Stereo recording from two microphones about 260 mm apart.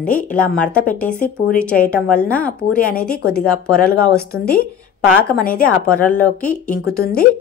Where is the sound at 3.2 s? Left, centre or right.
Left.